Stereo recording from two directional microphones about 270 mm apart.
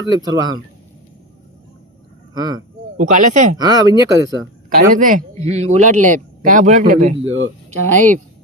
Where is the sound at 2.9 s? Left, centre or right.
Right.